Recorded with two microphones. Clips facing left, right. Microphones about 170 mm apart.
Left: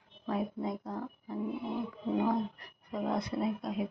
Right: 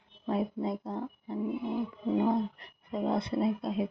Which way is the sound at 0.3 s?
25° right (ahead or behind).